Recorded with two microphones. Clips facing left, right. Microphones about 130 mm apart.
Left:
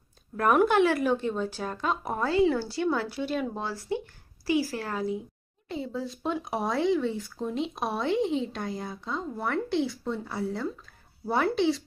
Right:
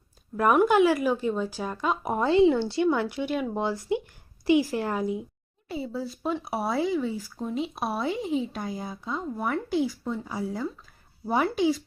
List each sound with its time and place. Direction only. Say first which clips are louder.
0.3 s speech: right 2 dB; 5° right (ahead or behind)
5.6 s speech: right 1 dB; 5° right (ahead or behind)